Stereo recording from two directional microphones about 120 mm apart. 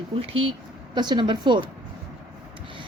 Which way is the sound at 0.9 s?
40° right (ahead or behind).